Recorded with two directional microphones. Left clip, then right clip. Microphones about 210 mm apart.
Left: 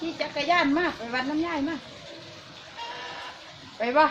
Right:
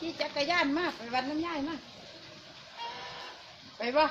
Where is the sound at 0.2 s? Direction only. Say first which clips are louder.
Left 5 dB; 25° right (ahead or behind).